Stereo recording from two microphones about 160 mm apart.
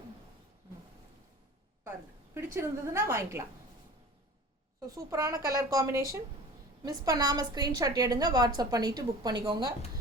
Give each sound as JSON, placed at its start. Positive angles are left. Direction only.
{"t": 2.3, "sound": "a woman's voice", "side_deg": -15}
{"t": 4.9, "sound": "a woman's voice", "side_deg": -20}